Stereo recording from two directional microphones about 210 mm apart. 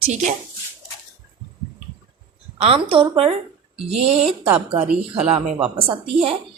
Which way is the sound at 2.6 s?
25° right (ahead or behind).